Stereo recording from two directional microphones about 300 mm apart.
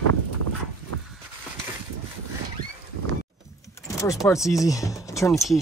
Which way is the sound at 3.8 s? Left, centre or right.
Centre.